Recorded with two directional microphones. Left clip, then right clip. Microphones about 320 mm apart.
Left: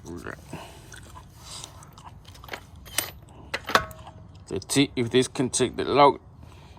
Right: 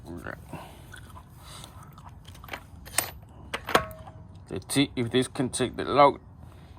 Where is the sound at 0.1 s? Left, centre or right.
Centre.